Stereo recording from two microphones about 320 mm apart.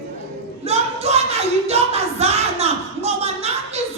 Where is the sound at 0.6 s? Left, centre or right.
Centre.